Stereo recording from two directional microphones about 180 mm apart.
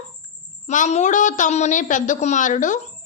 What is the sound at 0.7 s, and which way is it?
Speech, 40° left (ahead or behind).